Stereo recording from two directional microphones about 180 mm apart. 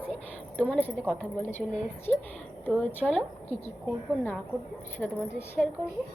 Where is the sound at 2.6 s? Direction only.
10° left (ahead or behind).